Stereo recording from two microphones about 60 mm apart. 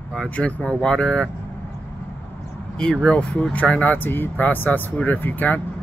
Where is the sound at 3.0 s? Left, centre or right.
Centre.